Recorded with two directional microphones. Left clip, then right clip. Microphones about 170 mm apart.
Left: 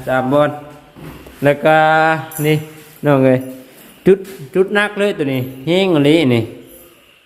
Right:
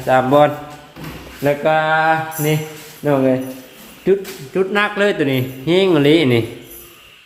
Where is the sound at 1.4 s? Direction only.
45° left (ahead or behind).